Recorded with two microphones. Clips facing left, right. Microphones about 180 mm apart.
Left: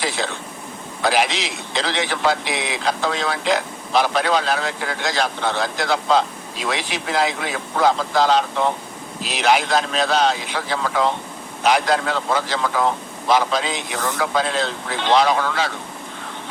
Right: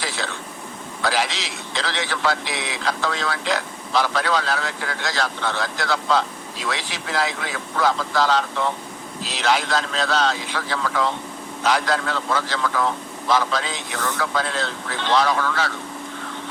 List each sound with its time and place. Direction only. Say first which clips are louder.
1.0 s a man's voice: left 4 dB; 15° left (ahead or behind)